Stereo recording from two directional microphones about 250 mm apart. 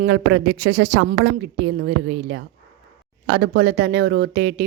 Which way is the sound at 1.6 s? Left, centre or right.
Right.